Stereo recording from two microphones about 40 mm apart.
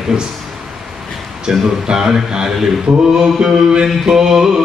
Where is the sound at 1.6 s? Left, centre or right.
Centre.